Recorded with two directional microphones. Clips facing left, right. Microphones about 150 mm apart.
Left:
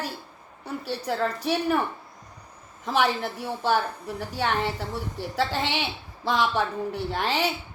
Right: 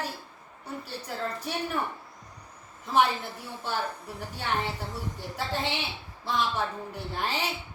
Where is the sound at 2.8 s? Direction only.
90° left.